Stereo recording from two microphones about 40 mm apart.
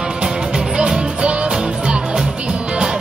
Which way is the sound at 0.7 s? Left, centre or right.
Right.